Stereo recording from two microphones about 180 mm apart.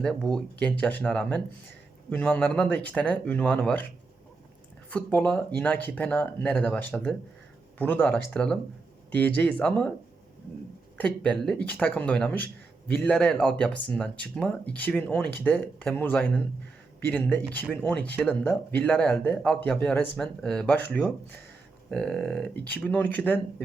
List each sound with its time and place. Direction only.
0.0 s speech: 5° left (ahead or behind)
4.9 s speech: 10° left (ahead or behind)
10.9 s speech: 5° left (ahead or behind)